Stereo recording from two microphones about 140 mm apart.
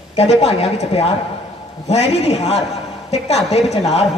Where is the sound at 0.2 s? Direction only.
45° left (ahead or behind).